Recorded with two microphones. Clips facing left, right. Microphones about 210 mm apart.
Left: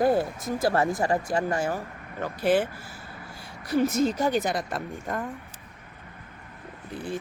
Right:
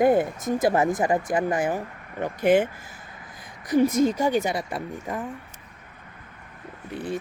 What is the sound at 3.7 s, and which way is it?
Speech, 15° right (ahead or behind).